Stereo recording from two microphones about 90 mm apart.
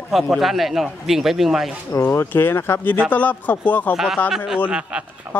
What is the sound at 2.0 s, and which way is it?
Speech, 25° left (ahead or behind).